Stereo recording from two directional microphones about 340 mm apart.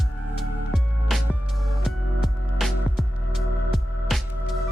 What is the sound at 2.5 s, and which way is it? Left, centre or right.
Music, centre.